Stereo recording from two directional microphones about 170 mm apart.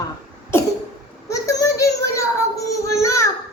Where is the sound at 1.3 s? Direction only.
20° left (ahead or behind).